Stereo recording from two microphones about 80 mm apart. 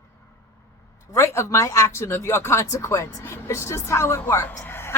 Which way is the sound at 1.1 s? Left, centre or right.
Left.